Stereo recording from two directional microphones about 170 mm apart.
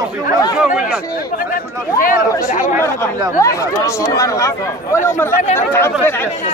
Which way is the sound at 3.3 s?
20° left (ahead or behind).